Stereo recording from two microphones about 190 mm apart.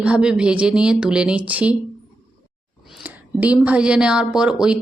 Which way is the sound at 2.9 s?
5° right (ahead or behind).